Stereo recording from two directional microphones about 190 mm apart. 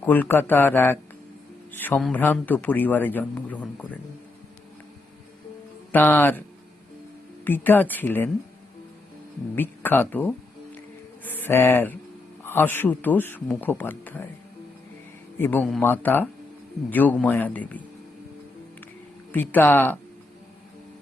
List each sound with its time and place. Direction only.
0.0 s speech: 10° left (ahead or behind)
5.9 s speech: 10° left (ahead or behind)
7.4 s speech: 10° left (ahead or behind)
9.6 s speech: 10° left (ahead or behind)
15.4 s speech: 10° left (ahead or behind)
19.3 s speech: 10° left (ahead or behind)